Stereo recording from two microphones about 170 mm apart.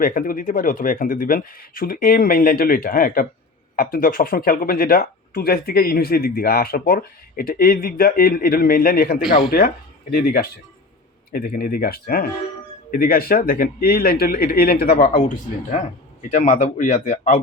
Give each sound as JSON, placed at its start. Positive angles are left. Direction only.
{"t": 0.0, "sound": "speech", "side_deg": 55}
{"t": 16.3, "sound": "speech", "side_deg": 45}